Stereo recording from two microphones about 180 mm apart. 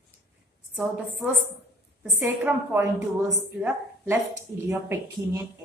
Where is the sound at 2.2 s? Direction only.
10° right (ahead or behind).